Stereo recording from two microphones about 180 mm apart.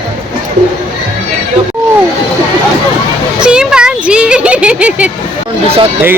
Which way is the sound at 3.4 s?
5° right (ahead or behind).